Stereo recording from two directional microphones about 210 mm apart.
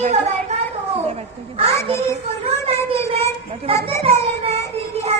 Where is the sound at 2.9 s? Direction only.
25° right (ahead or behind).